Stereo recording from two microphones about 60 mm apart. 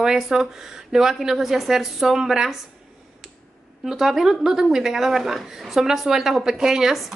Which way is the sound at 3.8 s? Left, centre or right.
Centre.